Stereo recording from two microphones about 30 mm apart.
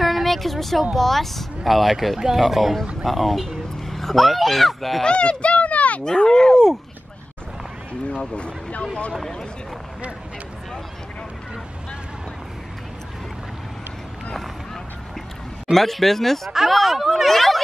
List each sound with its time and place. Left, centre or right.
0.0 s a sound: centre
0.9 s speech: centre
5.0 s speech: left
6.0 s speech: left
15.7 s speech: centre
16.5 s speech: centre
17.3 s speech: centre